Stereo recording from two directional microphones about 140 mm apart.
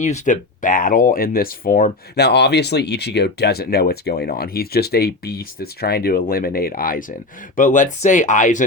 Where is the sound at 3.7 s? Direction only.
90° left.